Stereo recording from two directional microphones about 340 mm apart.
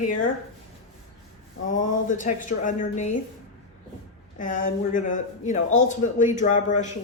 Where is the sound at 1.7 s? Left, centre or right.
Left.